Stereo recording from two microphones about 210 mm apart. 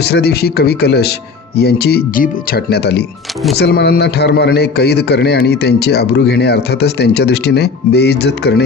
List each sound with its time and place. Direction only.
0.0 s a man's voice: 50° left (ahead or behind)